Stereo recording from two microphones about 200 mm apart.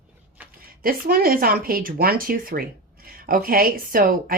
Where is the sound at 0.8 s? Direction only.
45° right (ahead or behind).